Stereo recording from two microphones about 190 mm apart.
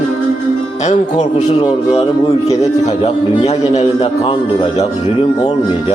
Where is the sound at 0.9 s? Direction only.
40° left (ahead or behind).